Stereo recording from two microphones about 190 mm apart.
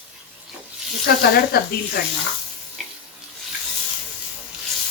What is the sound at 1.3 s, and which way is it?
Speech, 55° left (ahead or behind).